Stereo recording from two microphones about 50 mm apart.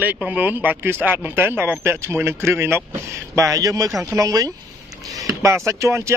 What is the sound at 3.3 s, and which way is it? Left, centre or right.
Speech, right.